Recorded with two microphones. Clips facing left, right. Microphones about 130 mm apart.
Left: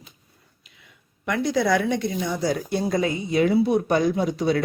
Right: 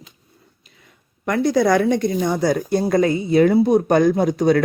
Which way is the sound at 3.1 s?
35° right (ahead or behind).